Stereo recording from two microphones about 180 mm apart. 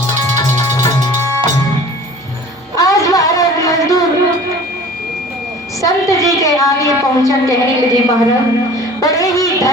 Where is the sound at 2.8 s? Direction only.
20° left (ahead or behind).